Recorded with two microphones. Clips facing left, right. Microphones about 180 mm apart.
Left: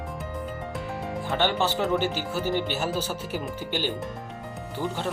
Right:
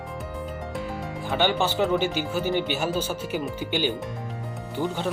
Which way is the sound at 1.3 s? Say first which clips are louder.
Right 2 dB; centre (ahead or behind).